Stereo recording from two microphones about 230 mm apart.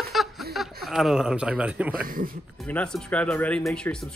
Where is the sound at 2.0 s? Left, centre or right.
Right.